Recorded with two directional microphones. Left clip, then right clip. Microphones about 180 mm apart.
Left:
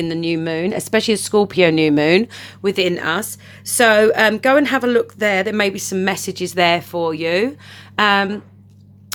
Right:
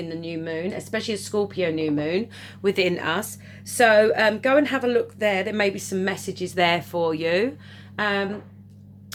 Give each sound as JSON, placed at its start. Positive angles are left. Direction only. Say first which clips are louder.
{"t": 0.0, "sound": "speech", "louder": "left 10 dB", "side_deg": 55}
{"t": 2.3, "sound": "speech", "louder": "left 4 dB", "side_deg": 25}
{"t": 7.9, "sound": "speech", "louder": "left 9 dB", "side_deg": 45}